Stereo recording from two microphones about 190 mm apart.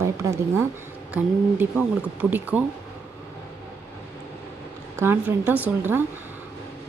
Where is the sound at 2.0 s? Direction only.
5° right (ahead or behind).